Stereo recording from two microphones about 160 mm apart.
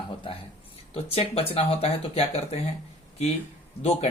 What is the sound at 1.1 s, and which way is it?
Speech, 35° left (ahead or behind).